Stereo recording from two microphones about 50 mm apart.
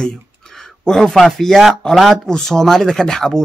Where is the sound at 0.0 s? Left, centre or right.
Centre.